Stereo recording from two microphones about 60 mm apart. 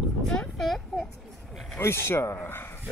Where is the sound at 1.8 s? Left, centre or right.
Left.